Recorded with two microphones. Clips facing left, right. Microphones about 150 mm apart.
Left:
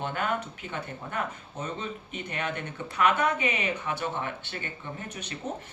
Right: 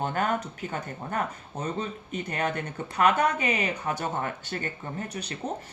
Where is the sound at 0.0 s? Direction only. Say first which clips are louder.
Right 3 dB; 45° right (ahead or behind).